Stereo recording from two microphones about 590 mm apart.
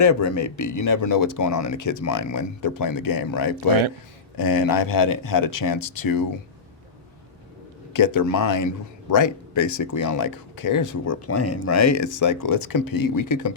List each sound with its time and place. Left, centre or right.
0.0 s a man's voice: left
7.9 s a man's voice: left